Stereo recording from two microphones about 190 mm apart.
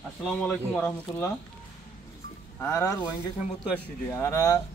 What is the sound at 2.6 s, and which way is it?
Speech, 15° left (ahead or behind).